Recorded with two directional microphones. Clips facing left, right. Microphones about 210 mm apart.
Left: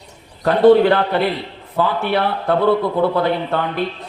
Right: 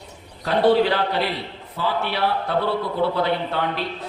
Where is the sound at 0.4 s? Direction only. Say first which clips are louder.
Left 7 dB; 50° left (ahead or behind).